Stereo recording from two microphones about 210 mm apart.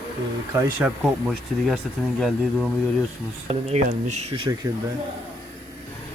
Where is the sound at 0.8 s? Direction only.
5° right (ahead or behind).